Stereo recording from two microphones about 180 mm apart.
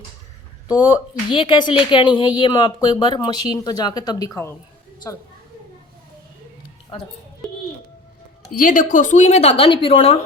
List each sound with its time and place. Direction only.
0.7 s speech: 20° left (ahead or behind)
6.9 s a woman's voice: 30° left (ahead or behind)
8.5 s a woman's voice: 50° left (ahead or behind); by 10.2 s 30° left (ahead or behind)